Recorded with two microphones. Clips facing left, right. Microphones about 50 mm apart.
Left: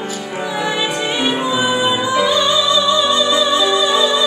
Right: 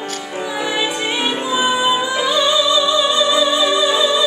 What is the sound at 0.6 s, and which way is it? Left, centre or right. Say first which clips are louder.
Music: left 1 dB; centre.